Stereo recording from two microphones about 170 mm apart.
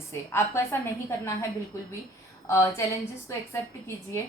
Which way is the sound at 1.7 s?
15° left (ahead or behind).